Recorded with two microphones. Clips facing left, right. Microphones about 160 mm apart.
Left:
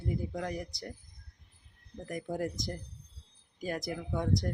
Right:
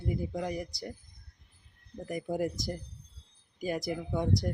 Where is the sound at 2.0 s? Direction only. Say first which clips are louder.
Right 3 dB; 5° right (ahead or behind).